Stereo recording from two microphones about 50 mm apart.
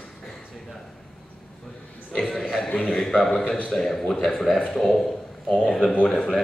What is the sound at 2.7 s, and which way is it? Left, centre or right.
Speech, left.